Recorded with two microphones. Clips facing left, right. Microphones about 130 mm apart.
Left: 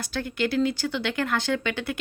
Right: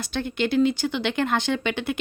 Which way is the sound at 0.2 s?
20° right (ahead or behind).